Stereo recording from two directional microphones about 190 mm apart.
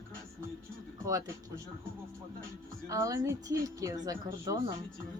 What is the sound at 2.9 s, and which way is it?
A woman's voice, 15° right (ahead or behind).